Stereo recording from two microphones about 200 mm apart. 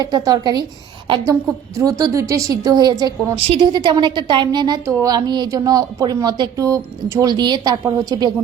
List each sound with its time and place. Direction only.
0.0 s a woman's voice: 20° right (ahead or behind)
1.7 s a woman's voice: 15° right (ahead or behind)